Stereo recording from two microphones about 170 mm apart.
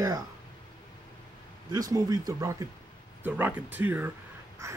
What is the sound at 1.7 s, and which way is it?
Speech, 20° right (ahead or behind).